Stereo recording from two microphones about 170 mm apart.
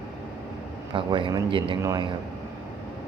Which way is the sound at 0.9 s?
30° right (ahead or behind).